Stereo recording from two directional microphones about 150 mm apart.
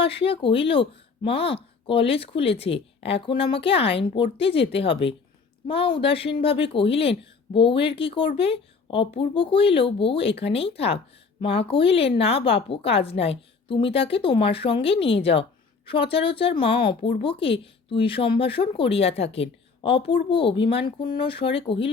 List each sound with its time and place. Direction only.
0.0 s speech: 40° left (ahead or behind)